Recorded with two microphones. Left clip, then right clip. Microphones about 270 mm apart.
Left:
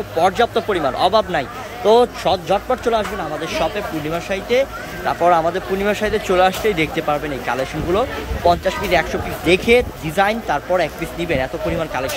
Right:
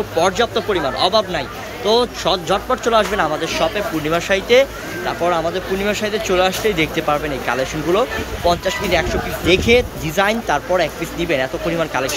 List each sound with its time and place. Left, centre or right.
0.2 s speech: centre